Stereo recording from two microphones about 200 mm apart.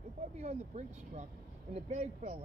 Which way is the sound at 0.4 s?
35° right (ahead or behind).